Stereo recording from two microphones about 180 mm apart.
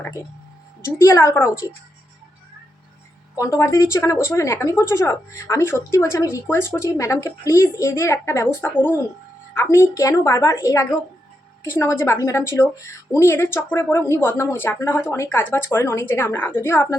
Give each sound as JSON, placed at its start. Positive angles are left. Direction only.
{"t": 0.9, "sound": "a woman's voice", "side_deg": 15}
{"t": 3.3, "sound": "a woman's voice", "side_deg": 15}